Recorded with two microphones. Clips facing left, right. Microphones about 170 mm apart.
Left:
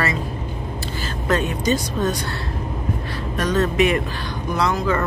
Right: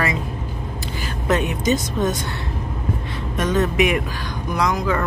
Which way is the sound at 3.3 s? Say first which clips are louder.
Even; 20° right (ahead or behind).